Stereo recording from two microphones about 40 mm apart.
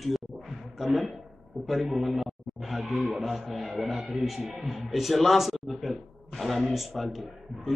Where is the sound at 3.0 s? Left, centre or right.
Right.